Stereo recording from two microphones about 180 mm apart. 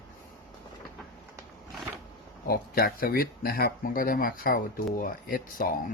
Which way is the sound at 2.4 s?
55° left (ahead or behind).